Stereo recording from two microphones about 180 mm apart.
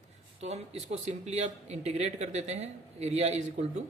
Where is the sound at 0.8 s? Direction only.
40° right (ahead or behind).